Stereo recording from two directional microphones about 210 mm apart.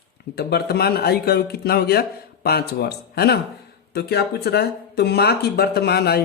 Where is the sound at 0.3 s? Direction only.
50° left (ahead or behind).